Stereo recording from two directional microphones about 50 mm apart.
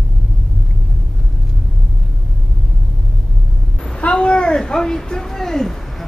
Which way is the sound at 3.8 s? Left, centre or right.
Left.